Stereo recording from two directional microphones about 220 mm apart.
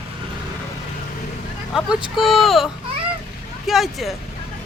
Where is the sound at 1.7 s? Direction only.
Centre (ahead or behind).